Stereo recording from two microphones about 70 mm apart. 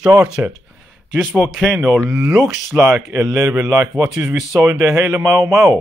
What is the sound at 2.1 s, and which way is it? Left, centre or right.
Speech, right.